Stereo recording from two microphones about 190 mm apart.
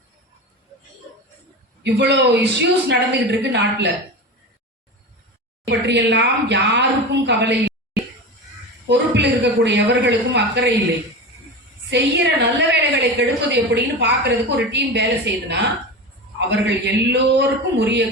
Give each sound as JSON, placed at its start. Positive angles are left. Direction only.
{"t": 1.8, "sound": "a woman's voice", "side_deg": -65}
{"t": 5.6, "sound": "a woman's voice", "side_deg": -65}
{"t": 8.9, "sound": "a woman's voice", "side_deg": -65}
{"t": 11.9, "sound": "a woman's voice", "side_deg": -65}